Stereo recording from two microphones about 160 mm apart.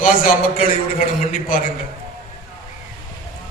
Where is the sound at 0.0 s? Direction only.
60° left (ahead or behind).